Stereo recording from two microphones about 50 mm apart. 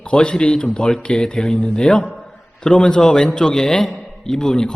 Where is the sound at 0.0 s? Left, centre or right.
Centre.